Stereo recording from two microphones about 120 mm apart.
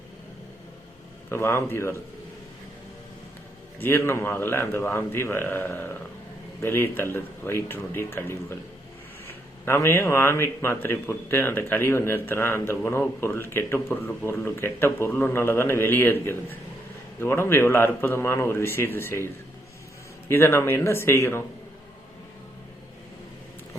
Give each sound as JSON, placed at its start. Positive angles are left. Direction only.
{"t": 1.3, "sound": "speech", "side_deg": 20}
{"t": 3.8, "sound": "speech", "side_deg": 20}